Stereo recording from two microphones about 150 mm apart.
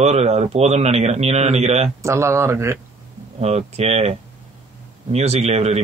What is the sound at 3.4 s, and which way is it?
Speech, 45° right (ahead or behind).